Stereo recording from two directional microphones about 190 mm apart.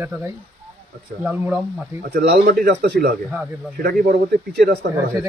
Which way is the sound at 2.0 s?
55° right (ahead or behind).